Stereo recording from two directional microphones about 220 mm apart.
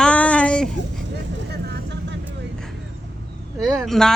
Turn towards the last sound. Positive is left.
turn(degrees=0)  # may be behind; listen again after turning